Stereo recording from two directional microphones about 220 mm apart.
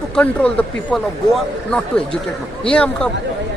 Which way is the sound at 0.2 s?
5° left (ahead or behind).